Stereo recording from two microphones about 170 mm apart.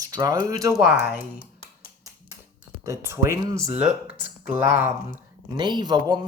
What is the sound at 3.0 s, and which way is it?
Speech, 15° right (ahead or behind).